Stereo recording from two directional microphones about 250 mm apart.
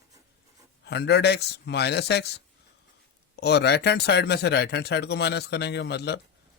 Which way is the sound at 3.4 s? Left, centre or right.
Left.